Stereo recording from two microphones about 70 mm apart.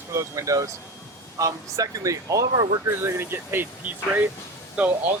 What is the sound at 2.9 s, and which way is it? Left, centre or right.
Speech, right.